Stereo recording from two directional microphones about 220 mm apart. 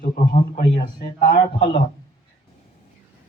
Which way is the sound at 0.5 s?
40° left (ahead or behind).